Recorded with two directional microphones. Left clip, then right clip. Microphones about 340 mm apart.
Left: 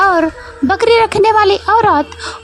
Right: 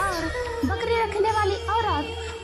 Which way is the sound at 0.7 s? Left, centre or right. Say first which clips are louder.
Left 16 dB; left.